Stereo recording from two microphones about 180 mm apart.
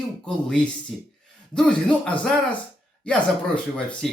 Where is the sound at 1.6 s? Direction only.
5° left (ahead or behind).